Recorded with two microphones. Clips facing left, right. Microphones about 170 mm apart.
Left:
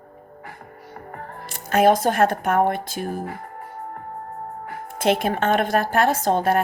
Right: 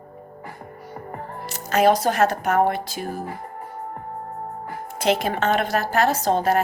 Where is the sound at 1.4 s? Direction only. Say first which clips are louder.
Left 1 dB; 55° left (ahead or behind).